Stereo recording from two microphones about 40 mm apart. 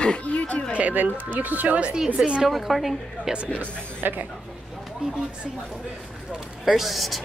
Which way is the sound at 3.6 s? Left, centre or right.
Right.